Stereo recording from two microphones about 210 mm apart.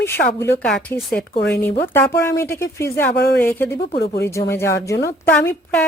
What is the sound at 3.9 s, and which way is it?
Speech, 45° left (ahead or behind).